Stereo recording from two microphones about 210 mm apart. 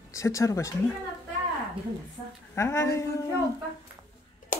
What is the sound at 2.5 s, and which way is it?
Speech, 15° left (ahead or behind).